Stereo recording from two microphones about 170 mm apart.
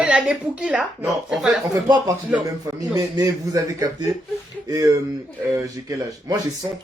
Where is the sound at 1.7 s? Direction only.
25° right (ahead or behind).